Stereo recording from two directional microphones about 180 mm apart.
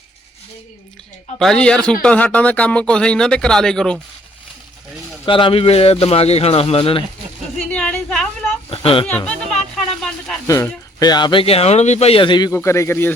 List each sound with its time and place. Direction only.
1.4 s speech: 5° left (ahead or behind)
5.2 s speech: 30° left (ahead or behind)
7.7 s a sound: 5° left (ahead or behind)
8.7 s a man's voice: 30° left (ahead or behind)
9.2 s a sound: 5° left (ahead or behind)
10.4 s a man's voice: 20° left (ahead or behind)